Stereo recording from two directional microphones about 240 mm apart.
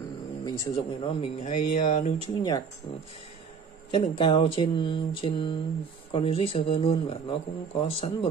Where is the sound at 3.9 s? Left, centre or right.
Left.